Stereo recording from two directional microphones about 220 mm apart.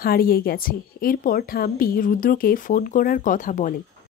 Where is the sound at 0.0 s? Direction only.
40° left (ahead or behind).